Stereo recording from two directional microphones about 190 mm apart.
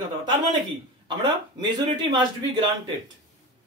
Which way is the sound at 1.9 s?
20° right (ahead or behind).